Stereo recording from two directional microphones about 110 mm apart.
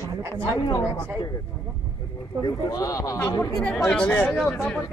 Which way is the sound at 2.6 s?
30° left (ahead or behind).